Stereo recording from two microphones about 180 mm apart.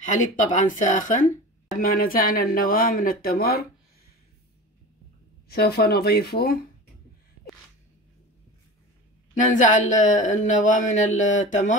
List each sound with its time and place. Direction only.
0.0 s speech: 45° left (ahead or behind)
5.5 s speech: 60° left (ahead or behind)
9.3 s speech: 45° left (ahead or behind)